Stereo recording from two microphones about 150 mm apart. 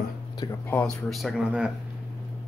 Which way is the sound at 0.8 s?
5° left (ahead or behind).